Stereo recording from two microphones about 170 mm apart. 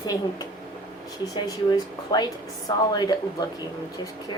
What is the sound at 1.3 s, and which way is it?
Speech, 25° left (ahead or behind).